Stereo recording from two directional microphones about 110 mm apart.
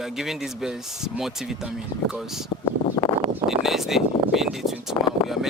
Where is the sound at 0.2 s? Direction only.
5° right (ahead or behind).